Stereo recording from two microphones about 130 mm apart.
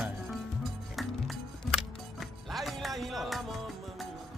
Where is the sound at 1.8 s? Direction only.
Centre (ahead or behind).